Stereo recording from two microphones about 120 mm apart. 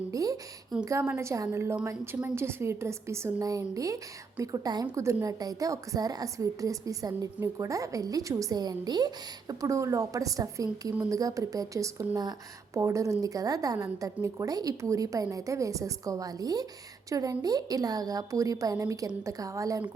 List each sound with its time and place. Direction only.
0.1 s a woman's voice: 30° right (ahead or behind)